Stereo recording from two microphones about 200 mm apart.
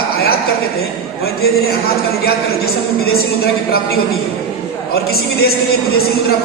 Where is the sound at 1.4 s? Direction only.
50° left (ahead or behind).